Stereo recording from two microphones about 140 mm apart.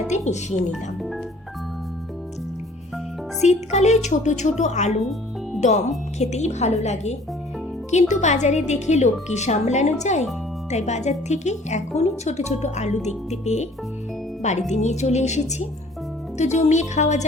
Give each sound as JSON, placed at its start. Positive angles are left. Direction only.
{"t": 0.1, "sound": "speech", "side_deg": 55}
{"t": 3.4, "sound": "a woman's voice", "side_deg": 55}
{"t": 14.7, "sound": "a woman's voice", "side_deg": 55}